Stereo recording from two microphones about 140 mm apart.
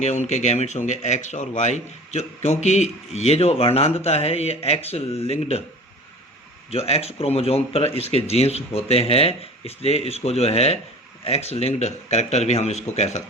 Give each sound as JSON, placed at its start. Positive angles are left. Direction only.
{"t": 0.0, "sound": "speech", "side_deg": 55}
{"t": 6.7, "sound": "speech", "side_deg": 45}